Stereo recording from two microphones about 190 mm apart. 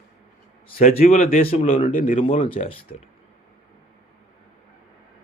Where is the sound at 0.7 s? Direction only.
35° left (ahead or behind).